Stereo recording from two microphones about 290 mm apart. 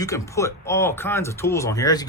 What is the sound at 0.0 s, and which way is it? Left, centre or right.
Speech, centre.